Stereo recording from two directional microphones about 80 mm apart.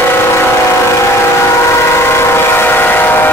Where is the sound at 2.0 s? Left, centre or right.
Left.